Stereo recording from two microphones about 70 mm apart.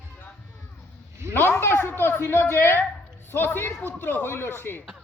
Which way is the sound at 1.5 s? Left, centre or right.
Left.